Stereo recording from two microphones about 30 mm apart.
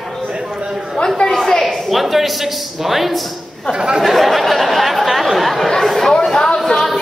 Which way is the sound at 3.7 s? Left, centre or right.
Right.